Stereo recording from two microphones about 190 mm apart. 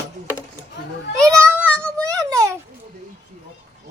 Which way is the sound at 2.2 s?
15° right (ahead or behind).